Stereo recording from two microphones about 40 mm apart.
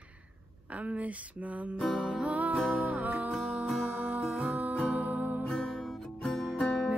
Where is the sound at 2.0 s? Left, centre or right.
Right.